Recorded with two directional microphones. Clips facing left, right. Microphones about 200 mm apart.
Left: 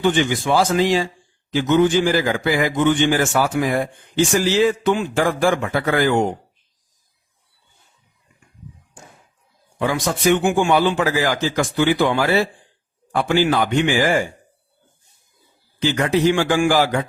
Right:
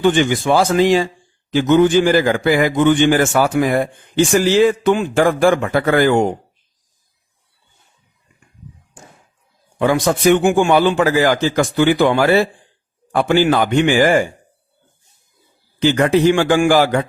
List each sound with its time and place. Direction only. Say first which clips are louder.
0.2 s a man's voice: right 3 dB; 55° right (ahead or behind)
9.7 s a man's voice: right 6 dB; 55° right (ahead or behind)
15.8 s a man's voice: right 4 dB; 55° right (ahead or behind)